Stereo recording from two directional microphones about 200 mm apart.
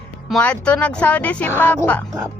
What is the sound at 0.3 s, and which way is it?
Speech, 5° left (ahead or behind).